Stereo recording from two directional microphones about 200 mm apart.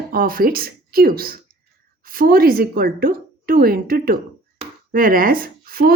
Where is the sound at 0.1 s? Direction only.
45° right (ahead or behind).